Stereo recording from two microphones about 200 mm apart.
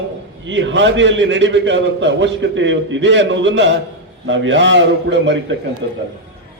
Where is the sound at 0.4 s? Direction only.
70° right (ahead or behind).